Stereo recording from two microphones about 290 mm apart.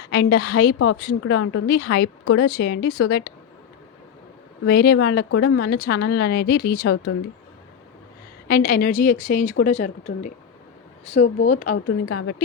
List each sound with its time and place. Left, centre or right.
0.1 s a woman's voice: left
1.2 s a woman's voice: left
2.2 s a woman's voice: left
2.5 s a woman's voice: left
4.6 s a woman's voice: left
5.3 s speech: left
5.6 s a woman's voice: left
8.4 s a woman's voice: left
12.0 s a woman's voice: left